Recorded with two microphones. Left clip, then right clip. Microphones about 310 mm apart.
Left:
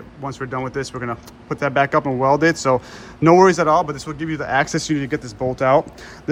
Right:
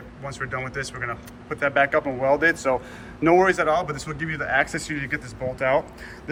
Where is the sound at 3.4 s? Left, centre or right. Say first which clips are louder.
Left 6 dB; left.